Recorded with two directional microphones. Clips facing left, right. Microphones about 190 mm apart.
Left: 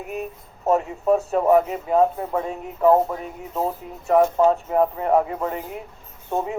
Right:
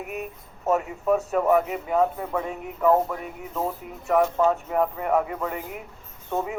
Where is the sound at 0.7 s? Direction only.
30° left (ahead or behind).